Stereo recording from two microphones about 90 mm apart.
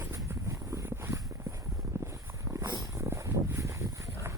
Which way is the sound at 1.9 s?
35° right (ahead or behind).